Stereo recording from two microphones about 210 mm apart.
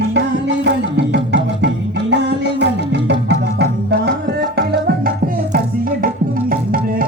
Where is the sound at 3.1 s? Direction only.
55° right (ahead or behind).